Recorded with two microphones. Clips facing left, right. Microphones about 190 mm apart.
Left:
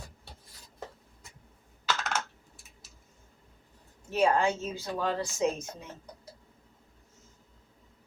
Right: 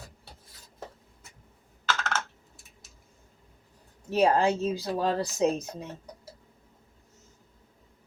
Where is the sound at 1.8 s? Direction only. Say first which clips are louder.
Right 1 dB; 15° left (ahead or behind).